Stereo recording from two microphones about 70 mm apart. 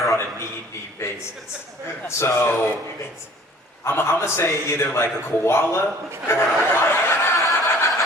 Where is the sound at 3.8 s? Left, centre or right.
Left.